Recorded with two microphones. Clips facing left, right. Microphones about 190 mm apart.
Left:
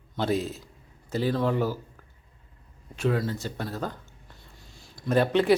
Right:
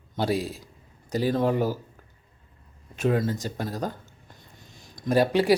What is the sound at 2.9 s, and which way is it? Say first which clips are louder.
Speech: right 2 dB; 20° right (ahead or behind).